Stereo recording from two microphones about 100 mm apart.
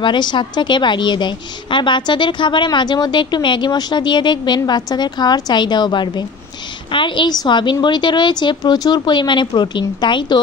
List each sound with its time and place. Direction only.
0.0 s a woman's voice: 50° left (ahead or behind)